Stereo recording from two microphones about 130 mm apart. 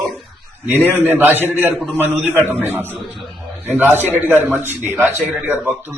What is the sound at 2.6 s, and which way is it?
A man's voice, 15° right (ahead or behind).